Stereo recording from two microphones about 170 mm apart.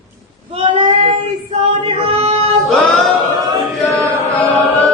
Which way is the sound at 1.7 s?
30° right (ahead or behind).